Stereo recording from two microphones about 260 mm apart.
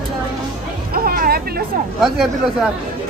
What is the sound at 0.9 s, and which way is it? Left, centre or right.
Hubbub, right.